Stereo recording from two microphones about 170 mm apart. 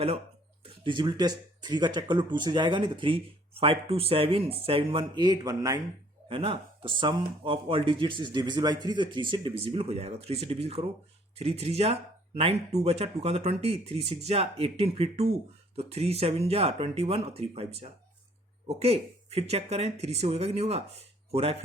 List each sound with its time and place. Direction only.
0.6 s speech: 30° right (ahead or behind)
6.2 s speech: 30° right (ahead or behind)